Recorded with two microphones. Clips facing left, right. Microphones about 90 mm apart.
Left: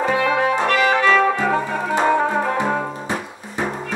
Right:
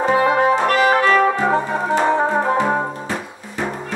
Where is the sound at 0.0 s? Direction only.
25° right (ahead or behind).